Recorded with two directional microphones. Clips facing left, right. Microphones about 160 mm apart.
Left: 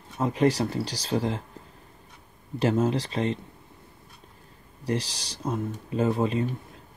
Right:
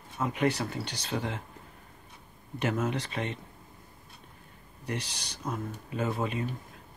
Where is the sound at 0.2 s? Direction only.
35° left (ahead or behind).